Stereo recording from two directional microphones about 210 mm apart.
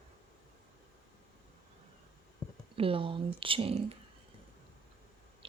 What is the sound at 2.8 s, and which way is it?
Speech, 25° right (ahead or behind).